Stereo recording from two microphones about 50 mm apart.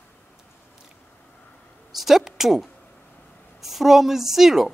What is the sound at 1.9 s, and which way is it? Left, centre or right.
A man's voice, centre.